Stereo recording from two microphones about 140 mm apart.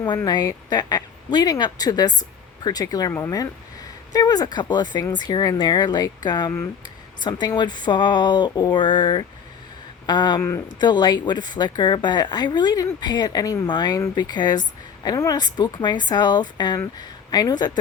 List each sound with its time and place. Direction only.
0.3 s speech: 30° left (ahead or behind)